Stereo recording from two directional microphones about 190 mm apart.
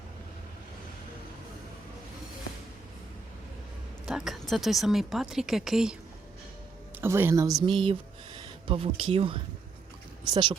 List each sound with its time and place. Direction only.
4.0 s speech: centre (ahead or behind)
7.0 s speech: 10° right (ahead or behind)
7.6 s speech: 25° right (ahead or behind)